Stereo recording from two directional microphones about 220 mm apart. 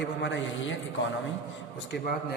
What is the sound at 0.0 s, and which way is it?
Speech, 55° left (ahead or behind).